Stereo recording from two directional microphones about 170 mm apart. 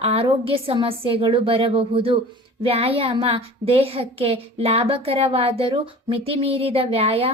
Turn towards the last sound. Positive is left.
turn(degrees=-35)  # may be behind; listen again after turning